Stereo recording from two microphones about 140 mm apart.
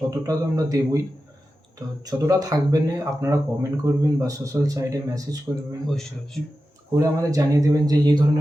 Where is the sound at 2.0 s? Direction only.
25° right (ahead or behind).